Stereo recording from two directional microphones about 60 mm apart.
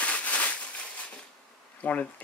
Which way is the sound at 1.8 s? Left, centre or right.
Left.